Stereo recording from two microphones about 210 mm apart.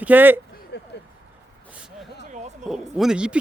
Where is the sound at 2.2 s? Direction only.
35° right (ahead or behind).